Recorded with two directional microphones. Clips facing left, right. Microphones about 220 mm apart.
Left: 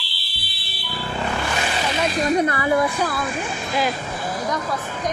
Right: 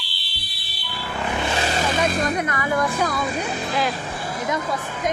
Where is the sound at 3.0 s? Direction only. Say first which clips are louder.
Right 1 dB; 5° left (ahead or behind).